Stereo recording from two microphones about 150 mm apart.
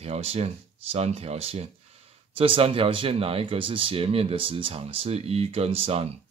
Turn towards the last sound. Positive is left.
turn(degrees=-40)  # may be behind; listen again after turning